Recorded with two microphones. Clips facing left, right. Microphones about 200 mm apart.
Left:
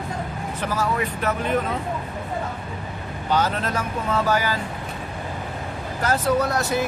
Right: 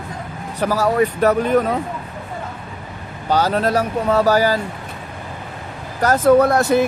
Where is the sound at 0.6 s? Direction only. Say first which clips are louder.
Right 8 dB; 40° right (ahead or behind).